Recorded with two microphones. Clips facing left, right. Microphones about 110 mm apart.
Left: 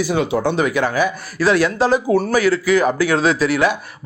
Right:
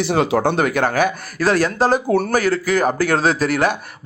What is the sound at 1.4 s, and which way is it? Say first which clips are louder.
Speech: left 1 dB; 40° right (ahead or behind).